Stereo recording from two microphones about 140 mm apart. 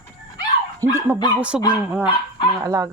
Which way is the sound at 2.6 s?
25° right (ahead or behind).